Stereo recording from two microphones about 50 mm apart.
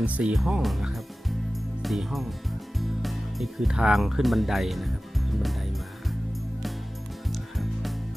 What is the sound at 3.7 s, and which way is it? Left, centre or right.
Speech, centre.